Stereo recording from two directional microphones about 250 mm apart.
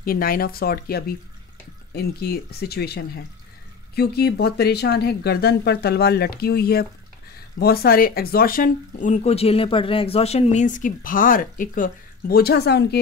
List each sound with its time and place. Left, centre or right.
0.0 s speech: left